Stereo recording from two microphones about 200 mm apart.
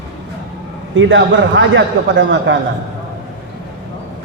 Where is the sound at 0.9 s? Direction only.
70° right (ahead or behind).